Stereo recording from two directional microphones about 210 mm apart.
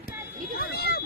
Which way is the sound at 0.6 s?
50° left (ahead or behind).